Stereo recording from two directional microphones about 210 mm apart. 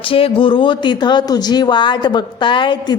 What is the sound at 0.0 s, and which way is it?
Speech, 25° left (ahead or behind).